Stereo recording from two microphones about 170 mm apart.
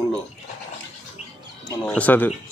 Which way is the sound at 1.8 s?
5° left (ahead or behind).